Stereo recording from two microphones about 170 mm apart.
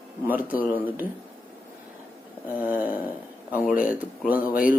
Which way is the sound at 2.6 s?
10° right (ahead or behind).